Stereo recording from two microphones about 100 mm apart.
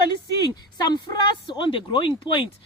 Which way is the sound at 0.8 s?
50° left (ahead or behind).